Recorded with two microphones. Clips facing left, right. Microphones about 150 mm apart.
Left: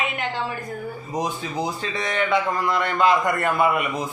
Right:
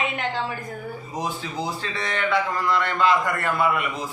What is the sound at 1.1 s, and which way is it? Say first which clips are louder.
A man's voice: left 3 dB; 20° left (ahead or behind).